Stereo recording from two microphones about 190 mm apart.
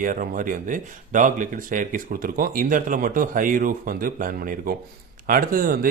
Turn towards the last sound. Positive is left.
turn(degrees=-50)  # may be behind; listen again after turning